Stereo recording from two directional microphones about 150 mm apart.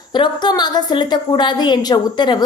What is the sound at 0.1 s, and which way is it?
A woman's voice, 30° left (ahead or behind).